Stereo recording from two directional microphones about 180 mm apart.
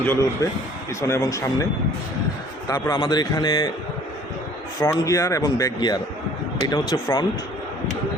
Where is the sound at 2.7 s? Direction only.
25° left (ahead or behind).